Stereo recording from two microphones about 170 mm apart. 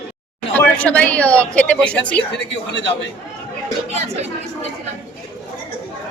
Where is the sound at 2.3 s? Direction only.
90° left.